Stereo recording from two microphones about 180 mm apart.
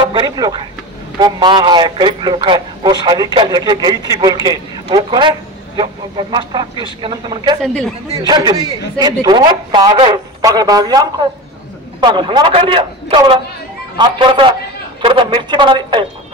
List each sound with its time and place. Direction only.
0.0 s a man's voice: 25° right (ahead or behind)
7.6 s speech: 5° left (ahead or behind)
8.3 s a man's voice: 25° right (ahead or behind)